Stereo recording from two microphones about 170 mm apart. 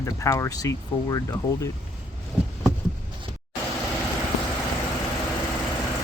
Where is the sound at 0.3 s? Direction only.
20° left (ahead or behind).